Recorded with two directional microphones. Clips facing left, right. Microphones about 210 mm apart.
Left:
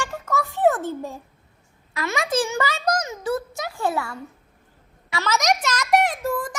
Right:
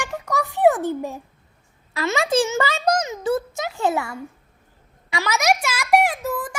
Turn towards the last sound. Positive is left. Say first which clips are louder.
# left 1 dB
turn(degrees=-5)  # may be behind; listen again after turning